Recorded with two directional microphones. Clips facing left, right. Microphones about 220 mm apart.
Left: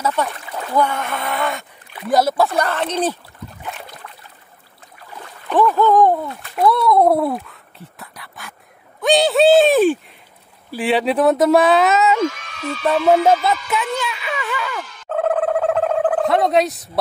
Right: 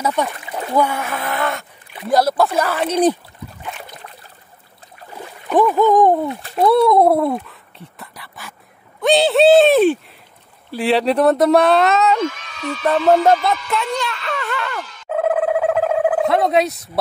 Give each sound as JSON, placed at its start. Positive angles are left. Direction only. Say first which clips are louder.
{"t": 0.0, "sound": "speech", "louder": "right 1 dB", "side_deg": -15}
{"t": 5.2, "sound": "speech", "louder": "right 1 dB", "side_deg": -10}
{"t": 6.4, "sound": "a child's voice", "louder": "right 3 dB", "side_deg": -30}
{"t": 7.0, "sound": "speech", "louder": "right 1 dB", "side_deg": 0}
{"t": 8.0, "sound": "a sound", "louder": "right 1 dB", "side_deg": 0}
{"t": 9.0, "sound": "speech", "louder": "right 1 dB", "side_deg": 0}
{"t": 15.0, "sound": "a sound", "louder": "right 1 dB", "side_deg": -5}